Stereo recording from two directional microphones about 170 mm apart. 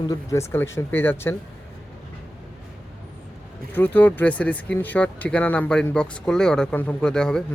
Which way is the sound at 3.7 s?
10° left (ahead or behind).